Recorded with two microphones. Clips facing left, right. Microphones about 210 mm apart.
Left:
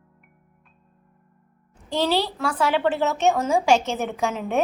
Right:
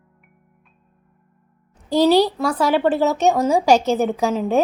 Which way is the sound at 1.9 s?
40° right (ahead or behind).